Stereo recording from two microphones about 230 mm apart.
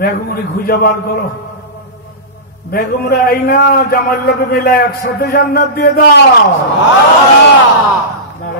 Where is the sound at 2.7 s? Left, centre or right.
Left.